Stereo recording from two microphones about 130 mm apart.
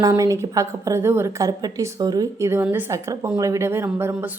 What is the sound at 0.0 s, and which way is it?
A woman's voice, 25° right (ahead or behind).